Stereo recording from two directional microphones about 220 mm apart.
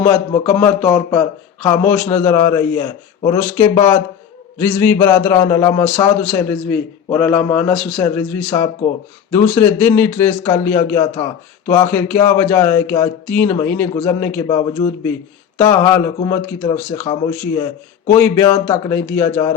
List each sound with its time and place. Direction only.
0.0 s speech: 5° left (ahead or behind)